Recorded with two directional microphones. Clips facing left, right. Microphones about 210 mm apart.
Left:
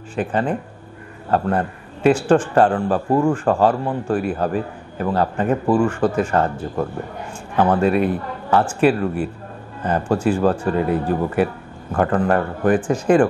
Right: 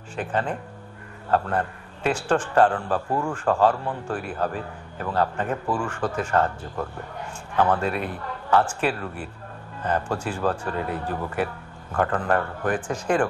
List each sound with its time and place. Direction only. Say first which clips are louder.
0.1 s a man's voice: left 6 dB; 10° left (ahead or behind)
3.1 s speech: left 13 dB; 20° left (ahead or behind)
3.3 s a man's voice: left 4 dB; 10° left (ahead or behind)